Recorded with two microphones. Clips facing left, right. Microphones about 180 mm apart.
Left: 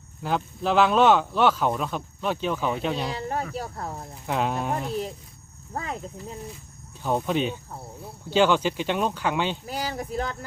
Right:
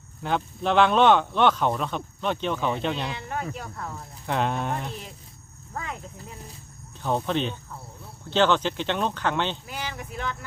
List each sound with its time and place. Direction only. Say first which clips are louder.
0.2 s speech: even; 5° left (ahead or behind)
3.1 s speech: left 3 dB; 35° left (ahead or behind)
4.3 s speech: even; 5° left (ahead or behind)
5.7 s speech: left 3 dB; 35° left (ahead or behind)
7.0 s speech: left 1 dB; 10° left (ahead or behind)
9.6 s speech: left 5 dB; 35° left (ahead or behind)